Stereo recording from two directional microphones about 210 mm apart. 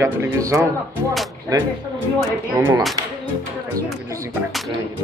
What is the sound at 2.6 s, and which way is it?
Speech, 5° right (ahead or behind).